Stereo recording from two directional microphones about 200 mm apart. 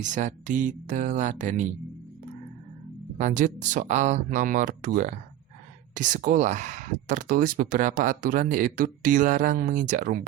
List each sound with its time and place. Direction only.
0.0 s speech: 40° right (ahead or behind)
3.2 s speech: 40° right (ahead or behind)